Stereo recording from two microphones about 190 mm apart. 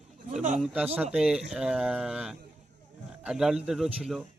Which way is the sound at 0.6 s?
5° right (ahead or behind).